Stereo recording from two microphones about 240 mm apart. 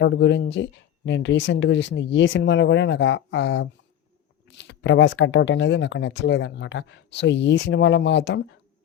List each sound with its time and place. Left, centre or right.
0.0 s speech: left